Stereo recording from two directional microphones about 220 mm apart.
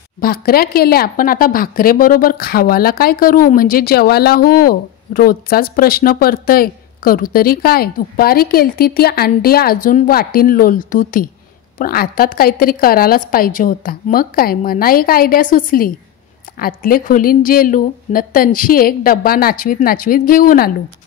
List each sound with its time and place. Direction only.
0.2 s a woman's voice: 45° left (ahead or behind)